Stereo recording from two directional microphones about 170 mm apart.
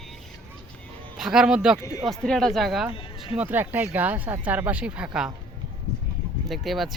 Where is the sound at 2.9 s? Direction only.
30° left (ahead or behind).